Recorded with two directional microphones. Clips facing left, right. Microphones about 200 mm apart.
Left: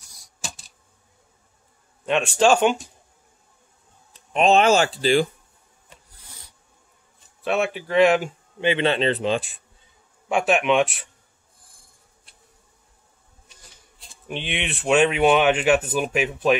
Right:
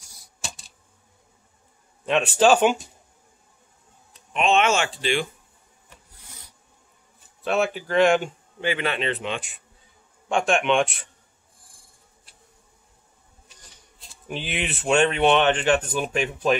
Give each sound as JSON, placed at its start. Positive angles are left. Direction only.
{"t": 2.0, "sound": "speech", "side_deg": 0}
{"t": 4.3, "sound": "speech", "side_deg": 35}
{"t": 7.4, "sound": "speech", "side_deg": 0}
{"t": 8.5, "sound": "speech", "side_deg": 25}
{"t": 10.2, "sound": "speech", "side_deg": 5}
{"t": 13.5, "sound": "speech", "side_deg": 0}